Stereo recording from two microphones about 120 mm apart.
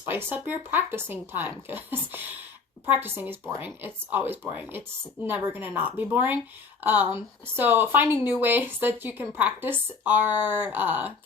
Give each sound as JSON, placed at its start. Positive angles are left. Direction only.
{"t": 0.0, "sound": "a woman's voice", "side_deg": -15}